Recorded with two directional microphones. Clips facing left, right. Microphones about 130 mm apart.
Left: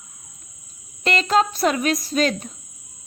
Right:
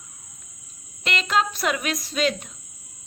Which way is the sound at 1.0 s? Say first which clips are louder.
Left 5 dB; 40° left (ahead or behind).